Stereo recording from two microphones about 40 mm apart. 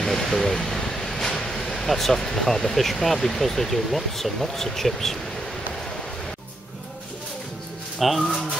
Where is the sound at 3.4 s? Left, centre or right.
Centre.